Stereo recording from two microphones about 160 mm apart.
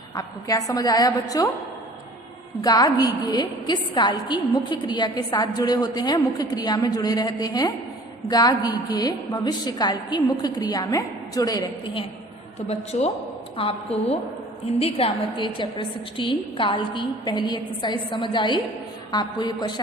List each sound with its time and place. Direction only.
0.2 s a woman's voice: 25° left (ahead or behind)
2.6 s a woman's voice: 25° left (ahead or behind)
12.6 s a woman's voice: 40° left (ahead or behind); by 19.8 s 25° left (ahead or behind)